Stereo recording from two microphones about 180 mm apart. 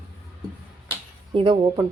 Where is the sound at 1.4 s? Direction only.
25° right (ahead or behind).